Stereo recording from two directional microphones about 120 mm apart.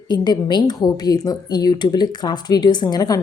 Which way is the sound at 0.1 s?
35° left (ahead or behind).